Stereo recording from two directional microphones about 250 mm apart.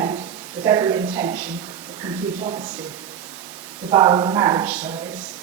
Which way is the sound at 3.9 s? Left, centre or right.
Centre.